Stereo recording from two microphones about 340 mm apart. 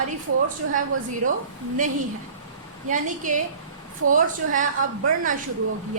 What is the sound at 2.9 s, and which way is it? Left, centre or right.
A woman's voice, right.